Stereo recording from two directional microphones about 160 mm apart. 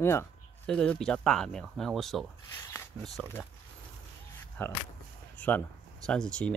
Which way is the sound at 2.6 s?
15° left (ahead or behind).